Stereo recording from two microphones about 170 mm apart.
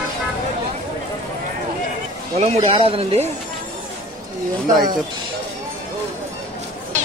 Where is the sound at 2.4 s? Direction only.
40° right (ahead or behind).